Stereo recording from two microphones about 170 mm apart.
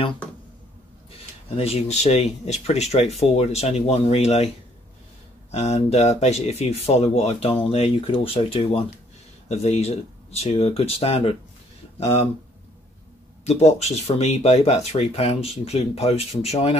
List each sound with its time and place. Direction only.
1.6 s speech: 40° left (ahead or behind)
5.5 s speech: 40° left (ahead or behind)
13.5 s speech: 40° left (ahead or behind)